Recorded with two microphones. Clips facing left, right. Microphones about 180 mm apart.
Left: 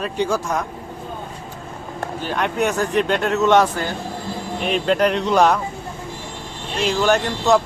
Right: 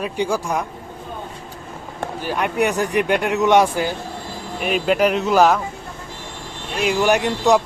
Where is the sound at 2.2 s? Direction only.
10° right (ahead or behind).